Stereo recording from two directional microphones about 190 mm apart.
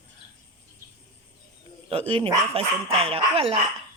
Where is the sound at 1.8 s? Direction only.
30° right (ahead or behind).